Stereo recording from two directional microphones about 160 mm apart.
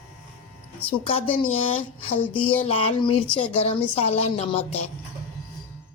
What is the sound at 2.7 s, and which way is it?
A woman's voice, 35° left (ahead or behind).